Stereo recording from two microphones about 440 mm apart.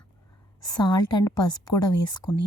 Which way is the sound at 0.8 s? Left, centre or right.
Centre.